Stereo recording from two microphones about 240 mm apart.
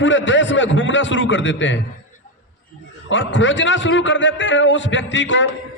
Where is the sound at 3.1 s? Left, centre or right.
Left.